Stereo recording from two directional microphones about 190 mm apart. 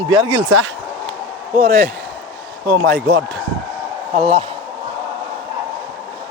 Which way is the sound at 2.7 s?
55° right (ahead or behind).